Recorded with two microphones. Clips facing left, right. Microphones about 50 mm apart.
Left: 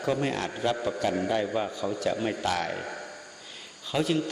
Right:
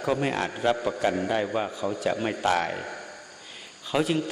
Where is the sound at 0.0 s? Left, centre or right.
Centre.